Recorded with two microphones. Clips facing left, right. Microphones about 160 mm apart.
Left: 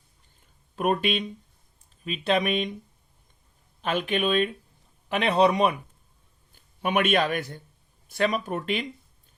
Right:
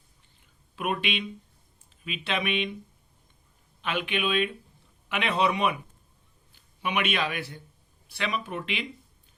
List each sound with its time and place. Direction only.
0.8 s a man's voice: 40° left (ahead or behind)
3.8 s a man's voice: 40° left (ahead or behind)